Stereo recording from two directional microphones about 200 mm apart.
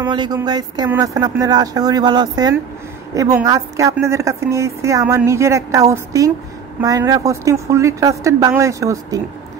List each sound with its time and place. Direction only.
0.1 s a woman's voice: 20° right (ahead or behind)